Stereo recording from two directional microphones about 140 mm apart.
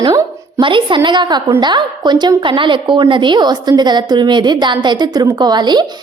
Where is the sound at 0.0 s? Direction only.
20° right (ahead or behind).